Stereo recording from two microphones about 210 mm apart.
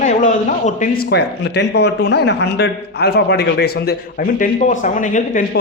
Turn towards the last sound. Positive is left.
turn(degrees=40)  # may be behind; listen again after turning